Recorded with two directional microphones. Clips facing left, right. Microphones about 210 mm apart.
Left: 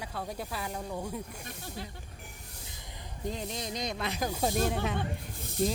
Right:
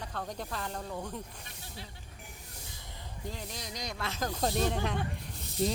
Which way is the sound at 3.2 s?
20° left (ahead or behind).